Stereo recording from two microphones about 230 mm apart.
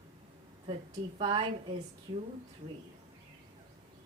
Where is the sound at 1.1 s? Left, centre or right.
Right.